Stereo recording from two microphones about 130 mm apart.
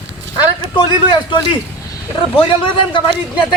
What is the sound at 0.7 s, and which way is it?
A man's voice, 40° left (ahead or behind).